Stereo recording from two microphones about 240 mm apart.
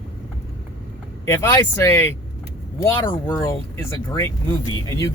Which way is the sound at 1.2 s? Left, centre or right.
Centre.